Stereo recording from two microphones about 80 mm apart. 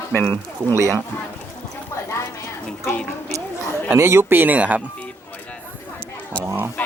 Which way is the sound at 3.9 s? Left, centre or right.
Right.